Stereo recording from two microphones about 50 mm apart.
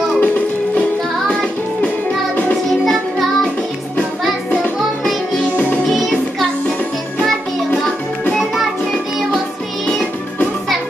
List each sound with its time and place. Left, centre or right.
0.2 s music: left
1.2 s music: centre
2.8 s music: centre
5.9 s music: centre